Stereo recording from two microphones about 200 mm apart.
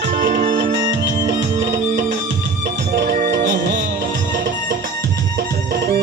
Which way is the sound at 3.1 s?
45° right (ahead or behind).